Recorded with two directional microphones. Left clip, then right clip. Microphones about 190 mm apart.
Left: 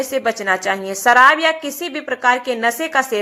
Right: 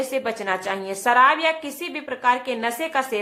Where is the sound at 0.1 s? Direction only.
15° left (ahead or behind).